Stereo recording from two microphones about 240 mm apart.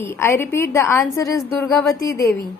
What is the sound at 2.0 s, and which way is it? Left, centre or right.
Speech, centre.